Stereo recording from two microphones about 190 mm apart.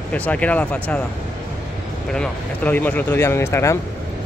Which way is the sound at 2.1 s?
5° left (ahead or behind).